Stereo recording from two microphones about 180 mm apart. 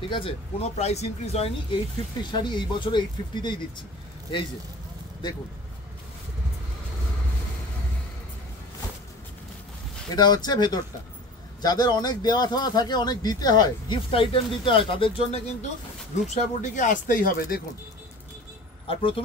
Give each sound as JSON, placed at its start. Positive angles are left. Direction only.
{"t": 0.1, "sound": "speech", "side_deg": 30}
{"t": 10.1, "sound": "speech", "side_deg": 25}
{"t": 16.3, "sound": "speech", "side_deg": 45}
{"t": 18.9, "sound": "speech", "side_deg": 30}